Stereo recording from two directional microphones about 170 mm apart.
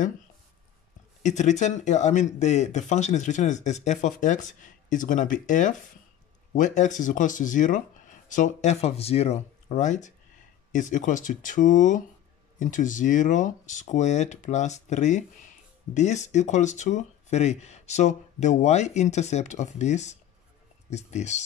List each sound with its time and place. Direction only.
1.2 s speech: 45° left (ahead or behind)